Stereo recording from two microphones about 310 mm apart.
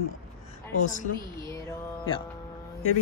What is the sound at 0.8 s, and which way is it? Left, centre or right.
Speech, left.